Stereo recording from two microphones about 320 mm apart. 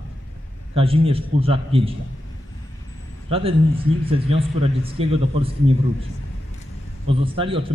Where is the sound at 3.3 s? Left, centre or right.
Centre.